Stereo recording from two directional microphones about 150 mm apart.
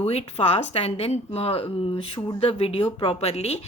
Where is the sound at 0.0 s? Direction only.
45° left (ahead or behind).